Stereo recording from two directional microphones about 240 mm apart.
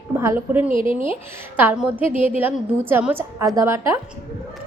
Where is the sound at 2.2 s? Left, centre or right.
Left.